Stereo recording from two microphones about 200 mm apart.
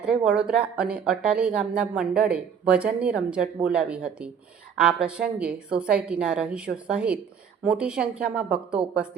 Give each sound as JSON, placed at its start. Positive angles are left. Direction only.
{"t": 0.0, "sound": "speech", "side_deg": -5}